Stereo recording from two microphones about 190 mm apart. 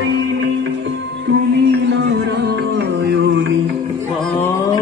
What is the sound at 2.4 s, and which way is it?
Music, 65° right (ahead or behind).